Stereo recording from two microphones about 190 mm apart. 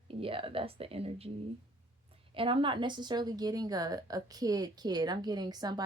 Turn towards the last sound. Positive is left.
turn(degrees=-20)  # may be behind; listen again after turning